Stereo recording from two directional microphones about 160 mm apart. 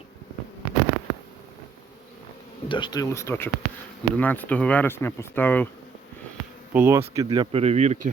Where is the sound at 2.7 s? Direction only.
30° left (ahead or behind); by 5.6 s 10° left (ahead or behind).